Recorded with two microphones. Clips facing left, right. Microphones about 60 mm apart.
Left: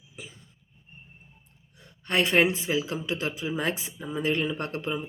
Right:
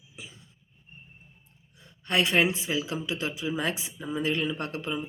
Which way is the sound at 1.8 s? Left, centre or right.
Left.